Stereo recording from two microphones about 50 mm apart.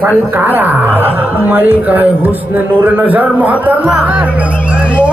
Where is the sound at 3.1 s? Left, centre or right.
Right.